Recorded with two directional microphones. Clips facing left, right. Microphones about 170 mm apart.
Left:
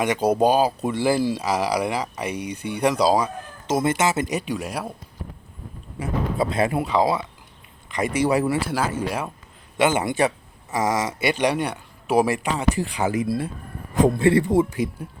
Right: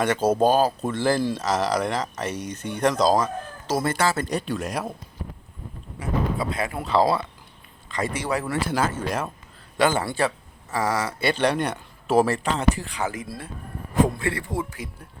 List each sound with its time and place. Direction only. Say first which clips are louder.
0.0 s speech: left 1 dB; 15° left (ahead or behind)
3.7 s speech: left 2 dB; 20° left (ahead or behind); by 4.9 s 5° left (ahead or behind)
6.5 s speech: left 6 dB; 25° left (ahead or behind)
6.7 s speech: right 4 dB; 10° left (ahead or behind)
14.2 s speech: left 10 dB; 25° left (ahead or behind)